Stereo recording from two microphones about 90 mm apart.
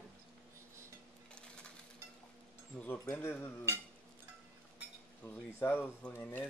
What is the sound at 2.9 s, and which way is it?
Speech, 20° left (ahead or behind).